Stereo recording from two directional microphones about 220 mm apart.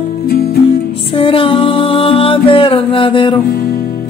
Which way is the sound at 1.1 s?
25° left (ahead or behind).